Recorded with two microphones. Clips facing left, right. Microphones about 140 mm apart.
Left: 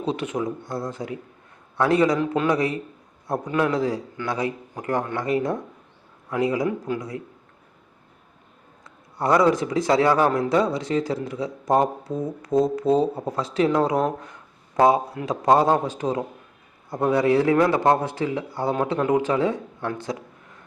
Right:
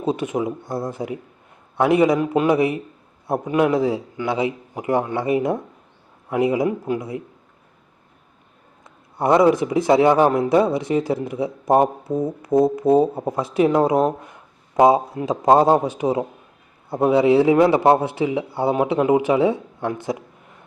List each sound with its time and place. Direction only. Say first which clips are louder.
0.1 s a man's voice: right 4 dB; 20° right (ahead or behind)
8.8 s a man's voice: right 4 dB; 20° right (ahead or behind)